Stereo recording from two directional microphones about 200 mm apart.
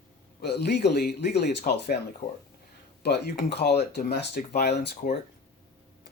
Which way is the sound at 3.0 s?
55° left (ahead or behind).